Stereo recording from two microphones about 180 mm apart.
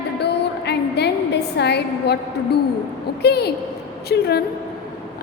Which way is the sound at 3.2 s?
65° left (ahead or behind).